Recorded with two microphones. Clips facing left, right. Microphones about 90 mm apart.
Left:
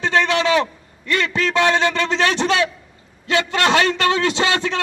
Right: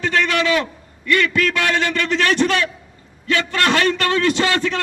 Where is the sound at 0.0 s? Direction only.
30° left (ahead or behind).